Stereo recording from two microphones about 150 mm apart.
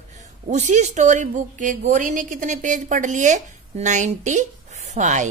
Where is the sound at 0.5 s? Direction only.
50° right (ahead or behind).